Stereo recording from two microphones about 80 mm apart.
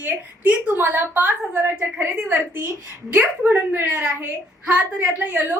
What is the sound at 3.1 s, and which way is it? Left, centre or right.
A woman's voice, right.